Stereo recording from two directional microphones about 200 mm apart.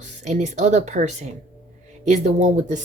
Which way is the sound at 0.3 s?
35° right (ahead or behind).